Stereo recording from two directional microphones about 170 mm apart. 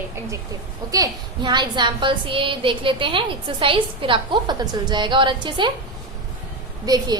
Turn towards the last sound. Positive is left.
turn(degrees=-20)  # may be behind; listen again after turning